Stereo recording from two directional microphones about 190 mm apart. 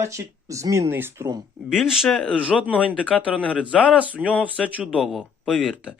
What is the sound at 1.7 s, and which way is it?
Speech, centre (ahead or behind).